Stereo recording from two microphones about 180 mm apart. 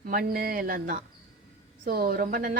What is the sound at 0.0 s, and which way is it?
A woman's voice, 55° right (ahead or behind).